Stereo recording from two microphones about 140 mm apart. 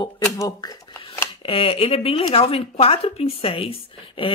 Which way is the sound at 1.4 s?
40° left (ahead or behind).